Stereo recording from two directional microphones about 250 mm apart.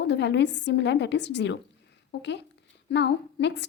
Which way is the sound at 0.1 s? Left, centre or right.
Left.